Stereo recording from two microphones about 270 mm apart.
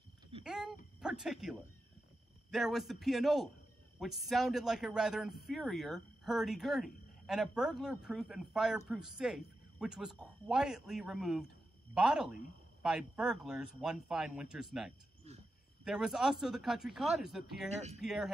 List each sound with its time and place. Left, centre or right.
0.4 s a sound: centre
0.9 s speech: centre
15.3 s speech: right
15.8 s speech: centre